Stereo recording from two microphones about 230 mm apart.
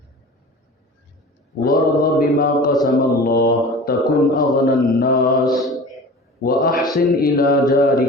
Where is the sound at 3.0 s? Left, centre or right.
Left.